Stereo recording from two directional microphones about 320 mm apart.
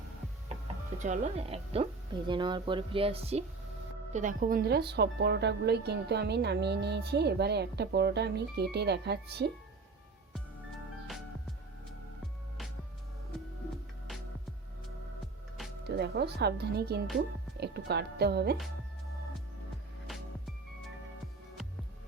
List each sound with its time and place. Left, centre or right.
0.9 s a woman's voice: right
15.9 s a woman's voice: right